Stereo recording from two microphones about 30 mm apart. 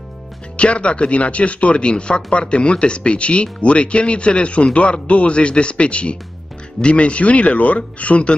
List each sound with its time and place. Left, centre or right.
0.6 s speech: left